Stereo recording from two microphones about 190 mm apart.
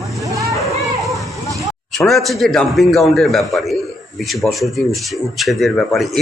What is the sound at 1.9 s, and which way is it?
A man's voice, centre (ahead or behind).